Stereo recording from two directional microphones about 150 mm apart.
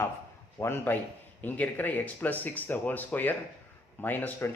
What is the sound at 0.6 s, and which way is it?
Speech, 15° left (ahead or behind).